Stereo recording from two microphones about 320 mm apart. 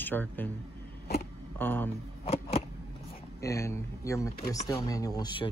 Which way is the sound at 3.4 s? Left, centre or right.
Centre.